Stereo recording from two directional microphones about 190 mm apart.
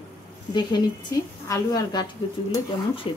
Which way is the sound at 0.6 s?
25° left (ahead or behind).